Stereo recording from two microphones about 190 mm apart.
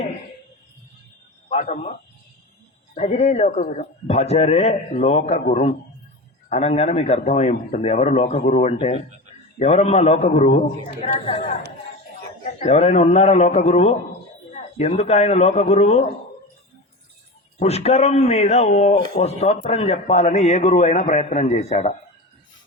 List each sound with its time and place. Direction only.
1.5 s a man's voice: 35° left (ahead or behind)
17.6 s a man's voice: 35° left (ahead or behind)